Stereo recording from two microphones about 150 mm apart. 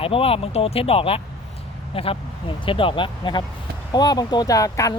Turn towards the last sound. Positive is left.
turn(degrees=20)  # may be behind; listen again after turning